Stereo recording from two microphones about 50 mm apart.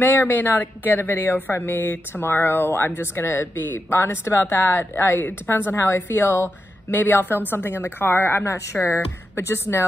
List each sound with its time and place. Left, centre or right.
0.0 s speech: left
4.6 s speech: left
6.9 s speech: left
8.5 s a woman's voice: left
8.7 s speech: left
9.3 s speech: left